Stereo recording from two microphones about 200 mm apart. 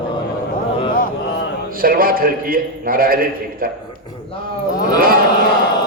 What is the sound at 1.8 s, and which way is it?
A man's voice, 45° right (ahead or behind).